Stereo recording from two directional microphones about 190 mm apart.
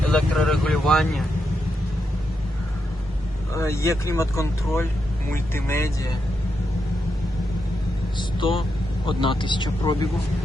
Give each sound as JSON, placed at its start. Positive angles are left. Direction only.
{"t": 0.0, "sound": "speech", "side_deg": 5}
{"t": 3.5, "sound": "speech", "side_deg": 15}
{"t": 8.2, "sound": "speech", "side_deg": 25}